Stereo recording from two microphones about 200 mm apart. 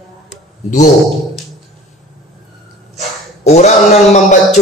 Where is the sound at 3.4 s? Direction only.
35° left (ahead or behind).